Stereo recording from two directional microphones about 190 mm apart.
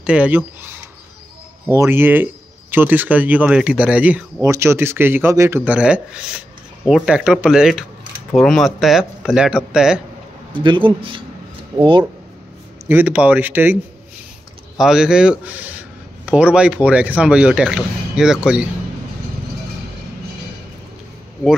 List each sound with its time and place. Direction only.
0.0 s speech: 5° right (ahead or behind)
1.8 s speech: 10° right (ahead or behind)
10.5 s speech: 25° right (ahead or behind)
12.8 s speech: 10° right (ahead or behind)
14.8 s speech: 5° right (ahead or behind)